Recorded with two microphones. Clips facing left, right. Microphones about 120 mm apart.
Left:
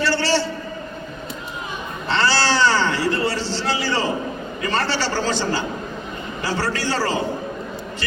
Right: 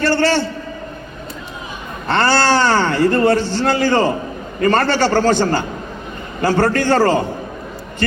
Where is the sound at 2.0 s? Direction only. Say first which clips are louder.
Right 5 dB; 50° right (ahead or behind).